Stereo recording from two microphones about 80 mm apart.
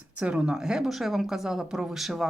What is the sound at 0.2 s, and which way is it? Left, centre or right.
Speech, centre.